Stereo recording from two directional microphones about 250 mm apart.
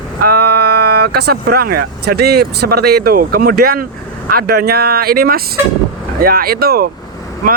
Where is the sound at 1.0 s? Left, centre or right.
Right.